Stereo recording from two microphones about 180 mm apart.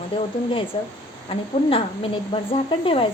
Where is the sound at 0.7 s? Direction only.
30° left (ahead or behind).